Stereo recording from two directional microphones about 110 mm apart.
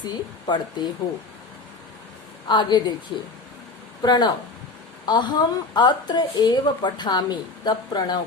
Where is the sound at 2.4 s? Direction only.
45° left (ahead or behind).